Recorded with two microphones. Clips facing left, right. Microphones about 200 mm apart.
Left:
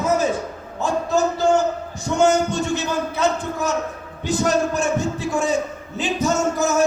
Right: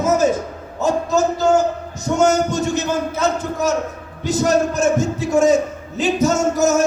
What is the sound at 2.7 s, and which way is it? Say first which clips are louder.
A man's voice: right 3 dB; 40° right (ahead or behind).